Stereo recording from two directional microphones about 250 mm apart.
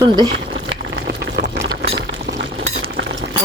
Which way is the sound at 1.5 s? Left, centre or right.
Centre.